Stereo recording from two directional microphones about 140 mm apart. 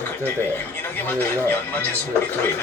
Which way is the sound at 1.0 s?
15° left (ahead or behind).